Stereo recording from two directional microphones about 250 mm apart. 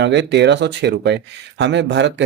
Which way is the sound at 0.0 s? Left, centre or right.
Right.